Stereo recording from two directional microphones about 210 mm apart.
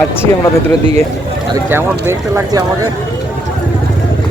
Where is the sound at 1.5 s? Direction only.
10° right (ahead or behind).